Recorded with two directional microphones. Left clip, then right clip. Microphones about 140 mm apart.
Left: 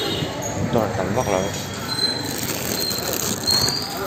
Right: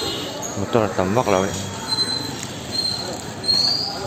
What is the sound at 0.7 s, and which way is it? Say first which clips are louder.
Speech: right 3 dB; 90° right.